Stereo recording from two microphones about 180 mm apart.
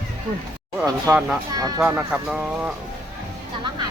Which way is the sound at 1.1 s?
5° right (ahead or behind).